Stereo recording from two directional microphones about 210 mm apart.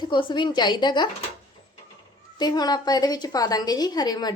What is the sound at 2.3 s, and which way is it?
Speech, 20° left (ahead or behind).